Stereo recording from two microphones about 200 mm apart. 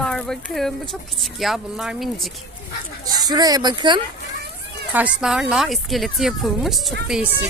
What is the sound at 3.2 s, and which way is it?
Speech, 20° right (ahead or behind).